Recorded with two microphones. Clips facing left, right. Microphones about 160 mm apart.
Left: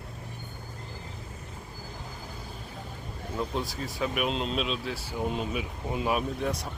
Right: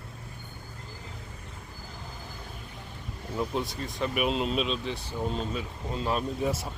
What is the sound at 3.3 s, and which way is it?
Speech, centre (ahead or behind).